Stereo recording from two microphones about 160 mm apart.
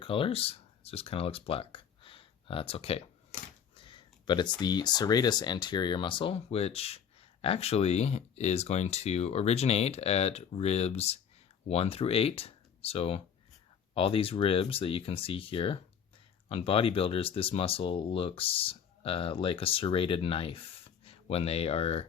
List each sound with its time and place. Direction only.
0.0 s speech: 35° left (ahead or behind)